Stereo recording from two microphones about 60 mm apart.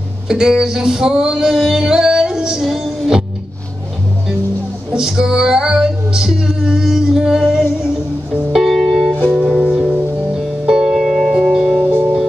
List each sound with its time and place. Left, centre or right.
0.3 s music: centre
4.9 s female singing: centre
8.5 s music: centre
9.3 s music: centre
10.3 s music: centre